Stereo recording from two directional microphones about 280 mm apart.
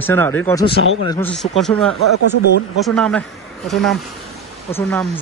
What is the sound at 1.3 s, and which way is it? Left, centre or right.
Speech, centre.